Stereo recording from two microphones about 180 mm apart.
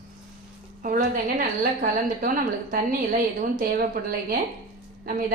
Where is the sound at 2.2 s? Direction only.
50° right (ahead or behind).